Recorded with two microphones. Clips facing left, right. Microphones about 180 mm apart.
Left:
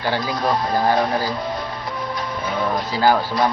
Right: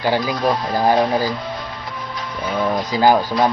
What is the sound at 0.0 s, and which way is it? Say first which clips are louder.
Speech: right 3 dB; 15° right (ahead or behind).